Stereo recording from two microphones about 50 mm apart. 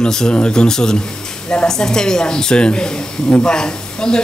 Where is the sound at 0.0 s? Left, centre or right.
Centre.